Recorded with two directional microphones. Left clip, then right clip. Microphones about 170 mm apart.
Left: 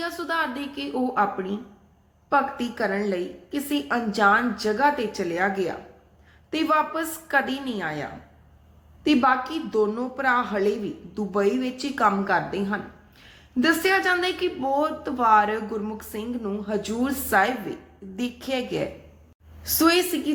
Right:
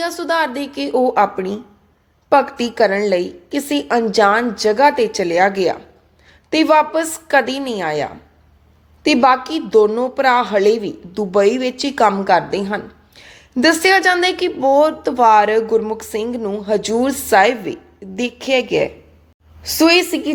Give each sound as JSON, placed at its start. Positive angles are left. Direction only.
{"t": 0.0, "sound": "a woman's voice", "side_deg": -35}